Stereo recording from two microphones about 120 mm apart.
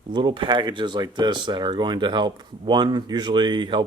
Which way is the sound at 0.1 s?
40° right (ahead or behind).